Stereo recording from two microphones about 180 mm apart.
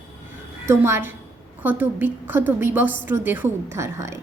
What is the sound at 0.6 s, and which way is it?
A woman's voice, 15° right (ahead or behind).